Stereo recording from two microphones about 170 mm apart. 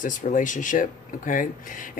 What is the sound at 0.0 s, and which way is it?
Speech, 50° left (ahead or behind).